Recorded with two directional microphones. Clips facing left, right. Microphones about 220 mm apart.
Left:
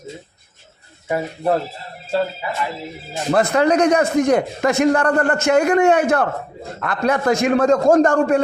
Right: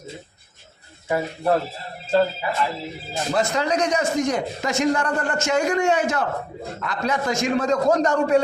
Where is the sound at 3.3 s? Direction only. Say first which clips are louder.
Left 7 dB; 60° left (ahead or behind).